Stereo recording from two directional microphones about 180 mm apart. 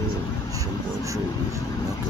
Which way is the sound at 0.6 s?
20° right (ahead or behind).